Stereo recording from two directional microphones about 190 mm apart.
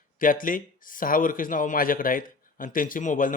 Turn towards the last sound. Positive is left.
turn(degrees=45)  # may be behind; listen again after turning